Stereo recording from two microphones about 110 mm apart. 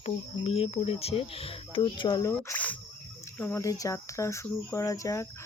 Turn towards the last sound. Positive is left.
turn(degrees=30)  # may be behind; listen again after turning